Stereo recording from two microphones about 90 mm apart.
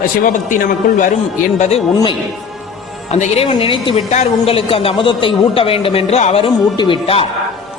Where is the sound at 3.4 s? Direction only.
85° left.